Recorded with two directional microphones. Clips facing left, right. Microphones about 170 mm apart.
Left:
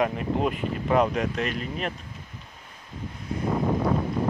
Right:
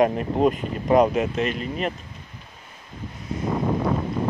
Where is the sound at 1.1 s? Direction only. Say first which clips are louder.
Right 4 dB; 5° right (ahead or behind).